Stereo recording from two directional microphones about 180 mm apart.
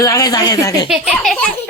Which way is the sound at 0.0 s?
20° left (ahead or behind).